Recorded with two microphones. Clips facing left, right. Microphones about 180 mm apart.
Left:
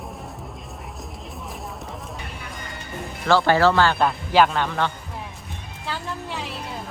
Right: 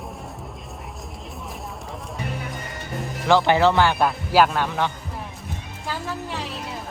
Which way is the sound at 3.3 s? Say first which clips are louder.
Even; 15° right (ahead or behind).